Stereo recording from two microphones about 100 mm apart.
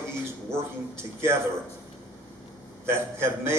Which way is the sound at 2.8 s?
25° right (ahead or behind).